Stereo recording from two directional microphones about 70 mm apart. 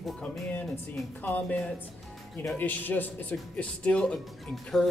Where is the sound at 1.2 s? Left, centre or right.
Left.